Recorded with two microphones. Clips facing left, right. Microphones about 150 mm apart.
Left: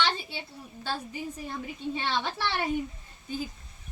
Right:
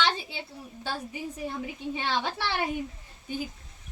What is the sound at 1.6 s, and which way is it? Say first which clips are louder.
Speech: even; 10° right (ahead or behind).